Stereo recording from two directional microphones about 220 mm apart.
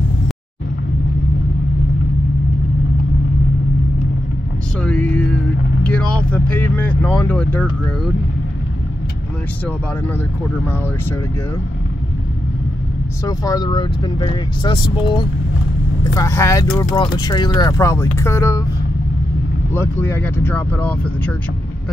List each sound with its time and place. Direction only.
4.8 s music: 5° left (ahead or behind)
5.9 s speech: 5° left (ahead or behind)
13.2 s speech: 15° left (ahead or behind)
19.7 s speech: 10° left (ahead or behind)